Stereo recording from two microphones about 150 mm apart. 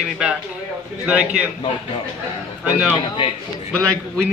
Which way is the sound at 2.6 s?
5° right (ahead or behind).